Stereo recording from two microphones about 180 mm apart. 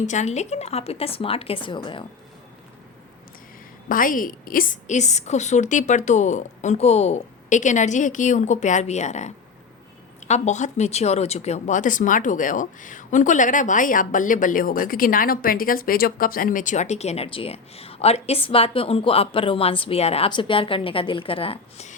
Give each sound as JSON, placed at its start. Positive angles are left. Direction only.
{"t": 0.0, "sound": "speech", "side_deg": 40}
{"t": 3.8, "sound": "speech", "side_deg": 50}